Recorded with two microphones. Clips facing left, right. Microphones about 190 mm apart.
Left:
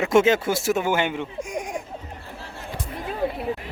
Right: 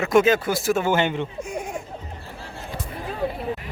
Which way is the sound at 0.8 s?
10° left (ahead or behind).